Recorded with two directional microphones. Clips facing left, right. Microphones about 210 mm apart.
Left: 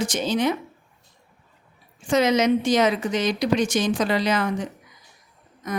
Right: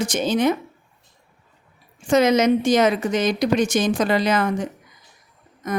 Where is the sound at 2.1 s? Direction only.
50° right (ahead or behind).